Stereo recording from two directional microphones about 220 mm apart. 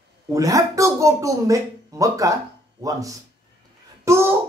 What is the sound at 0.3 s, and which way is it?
Speech, 15° right (ahead or behind).